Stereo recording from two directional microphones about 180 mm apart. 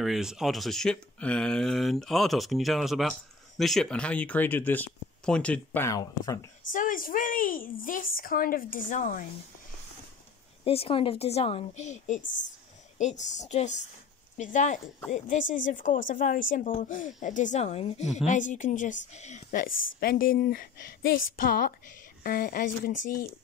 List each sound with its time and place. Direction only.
0.0 s speech: centre (ahead or behind); by 6.4 s 20° left (ahead or behind)
6.7 s speech: 50° left (ahead or behind)
10.6 s a woman's voice: 30° left (ahead or behind); by 22.9 s 55° left (ahead or behind)